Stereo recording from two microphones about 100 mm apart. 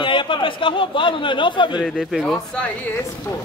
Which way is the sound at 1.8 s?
5° left (ahead or behind).